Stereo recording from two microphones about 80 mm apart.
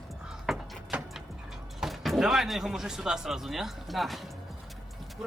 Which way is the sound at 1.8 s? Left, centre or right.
Centre.